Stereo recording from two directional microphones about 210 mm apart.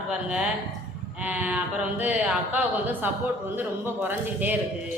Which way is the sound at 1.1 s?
5° right (ahead or behind).